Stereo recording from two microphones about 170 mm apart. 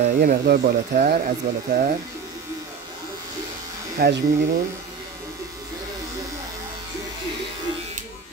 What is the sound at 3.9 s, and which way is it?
Speech, 65° right (ahead or behind).